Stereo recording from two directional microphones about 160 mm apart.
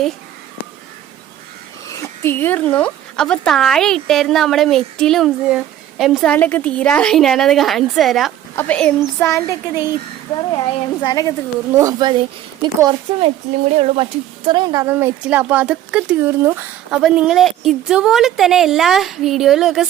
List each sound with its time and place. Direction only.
1.9 s speech: 15° left (ahead or behind); by 6.3 s centre (ahead or behind)
6.3 s a woman's voice: 10° left (ahead or behind)
11.7 s speech: 20° right (ahead or behind)
13.7 s speech: 35° right (ahead or behind)
14.8 s speech: 10° right (ahead or behind)
16.9 s speech: 5° right (ahead or behind)